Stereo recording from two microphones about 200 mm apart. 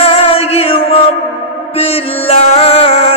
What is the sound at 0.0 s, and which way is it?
Music, 30° left (ahead or behind).